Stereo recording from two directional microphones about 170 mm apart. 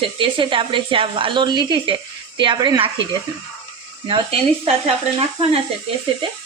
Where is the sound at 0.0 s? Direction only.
30° right (ahead or behind).